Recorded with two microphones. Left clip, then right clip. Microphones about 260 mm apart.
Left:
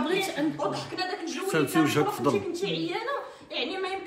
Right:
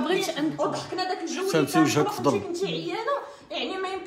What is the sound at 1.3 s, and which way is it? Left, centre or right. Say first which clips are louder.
Speech: right 3 dB; right.